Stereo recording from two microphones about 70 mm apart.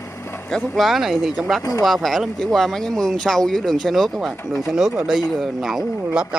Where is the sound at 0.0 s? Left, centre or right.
Left.